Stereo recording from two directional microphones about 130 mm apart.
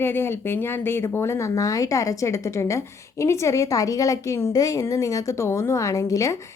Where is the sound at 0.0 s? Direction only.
15° left (ahead or behind).